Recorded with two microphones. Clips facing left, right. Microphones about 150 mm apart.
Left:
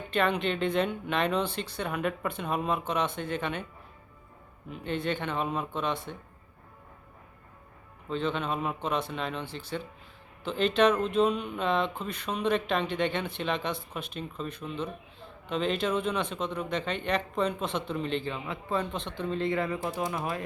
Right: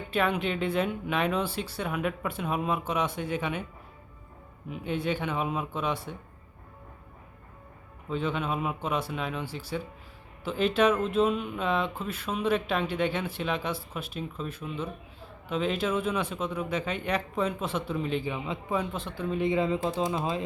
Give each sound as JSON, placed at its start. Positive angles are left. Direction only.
{"t": 0.1, "sound": "speech", "side_deg": -5}
{"t": 4.7, "sound": "speech", "side_deg": -10}
{"t": 8.1, "sound": "speech", "side_deg": -10}